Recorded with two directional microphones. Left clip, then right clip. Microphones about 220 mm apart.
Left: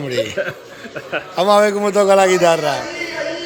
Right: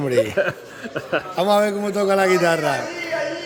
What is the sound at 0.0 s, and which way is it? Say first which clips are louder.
Speech: right 2 dB; 20° right (ahead or behind).